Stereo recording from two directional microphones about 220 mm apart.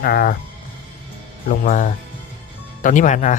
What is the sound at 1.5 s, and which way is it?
Speech, 35° left (ahead or behind).